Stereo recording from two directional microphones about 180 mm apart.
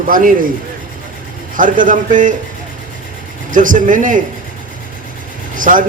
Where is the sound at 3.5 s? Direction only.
45° right (ahead or behind).